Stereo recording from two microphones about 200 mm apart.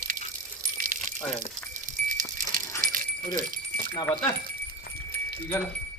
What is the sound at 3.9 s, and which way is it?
Speech, 10° left (ahead or behind).